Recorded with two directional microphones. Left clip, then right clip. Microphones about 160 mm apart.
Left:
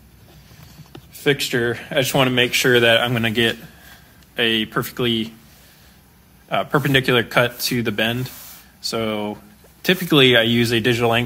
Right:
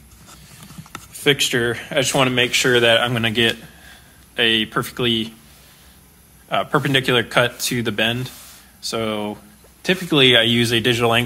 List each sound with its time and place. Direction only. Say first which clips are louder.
1.1 s speech: right 2 dB; 5° right (ahead or behind)
6.5 s speech: even; 5° left (ahead or behind)
9.8 s speech: left 2 dB; 30° left (ahead or behind)
10.2 s speech: right 3 dB; 10° left (ahead or behind)